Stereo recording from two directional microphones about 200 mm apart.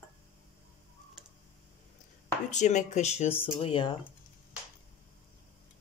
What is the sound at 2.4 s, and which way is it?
Speech, 35° left (ahead or behind).